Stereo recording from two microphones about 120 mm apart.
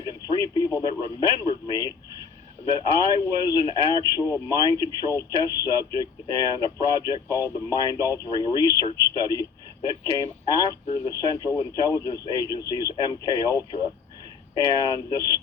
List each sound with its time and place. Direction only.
0.0 s radio: 30° left (ahead or behind)
2.6 s speech: 30° left (ahead or behind)
10.8 s speech: 60° left (ahead or behind)
11.1 s speech: 30° left (ahead or behind)